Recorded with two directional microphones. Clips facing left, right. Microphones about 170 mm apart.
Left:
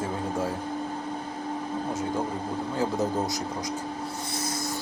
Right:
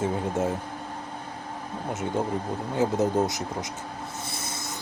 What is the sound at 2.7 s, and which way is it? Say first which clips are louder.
Speech: right 4 dB; 20° right (ahead or behind).